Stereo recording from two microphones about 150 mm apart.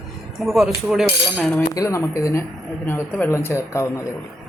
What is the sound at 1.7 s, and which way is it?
A man's voice, 20° left (ahead or behind).